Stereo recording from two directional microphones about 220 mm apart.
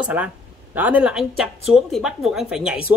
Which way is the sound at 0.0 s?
5° right (ahead or behind).